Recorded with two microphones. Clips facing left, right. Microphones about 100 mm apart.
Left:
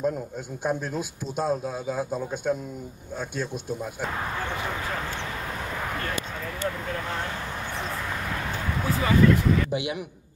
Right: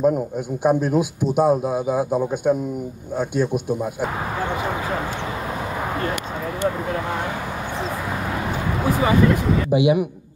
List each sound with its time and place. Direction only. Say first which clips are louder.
0.7 s a man's voice: right 10 dB; 15° right (ahead or behind)
8.8 s speech: right 3 dB; 15° right (ahead or behind)